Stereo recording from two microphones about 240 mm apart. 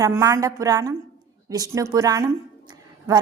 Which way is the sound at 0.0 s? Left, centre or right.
Centre.